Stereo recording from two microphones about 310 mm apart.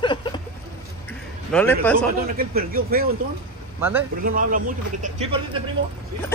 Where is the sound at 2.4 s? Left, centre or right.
Right.